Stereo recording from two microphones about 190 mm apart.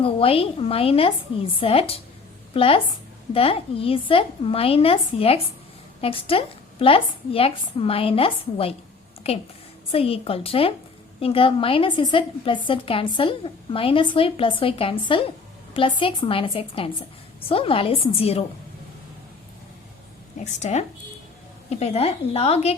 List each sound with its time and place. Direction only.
0.0 s a woman's voice: 30° left (ahead or behind)
20.4 s speech: 35° left (ahead or behind)